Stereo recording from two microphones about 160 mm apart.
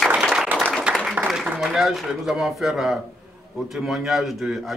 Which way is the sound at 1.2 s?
5° right (ahead or behind).